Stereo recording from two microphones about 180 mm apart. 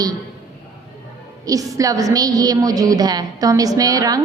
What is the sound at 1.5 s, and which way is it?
A woman's voice, 20° right (ahead or behind).